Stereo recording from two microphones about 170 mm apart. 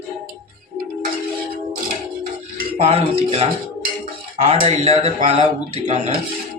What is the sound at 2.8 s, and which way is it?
Speech, 35° right (ahead or behind).